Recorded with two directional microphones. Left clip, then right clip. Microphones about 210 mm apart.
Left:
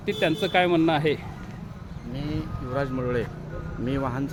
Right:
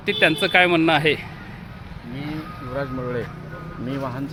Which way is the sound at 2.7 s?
25° left (ahead or behind).